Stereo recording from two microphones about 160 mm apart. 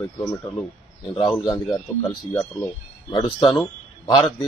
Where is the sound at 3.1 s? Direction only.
35° left (ahead or behind).